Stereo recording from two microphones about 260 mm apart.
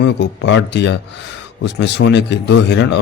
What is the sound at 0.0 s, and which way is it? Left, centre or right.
A man's voice, left.